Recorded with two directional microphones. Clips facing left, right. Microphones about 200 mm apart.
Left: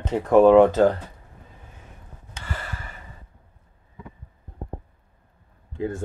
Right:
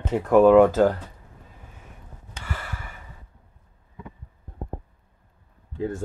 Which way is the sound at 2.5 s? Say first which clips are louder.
Left 1 dB; 10° right (ahead or behind).